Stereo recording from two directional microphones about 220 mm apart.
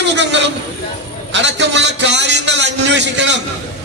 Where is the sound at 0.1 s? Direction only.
55° right (ahead or behind).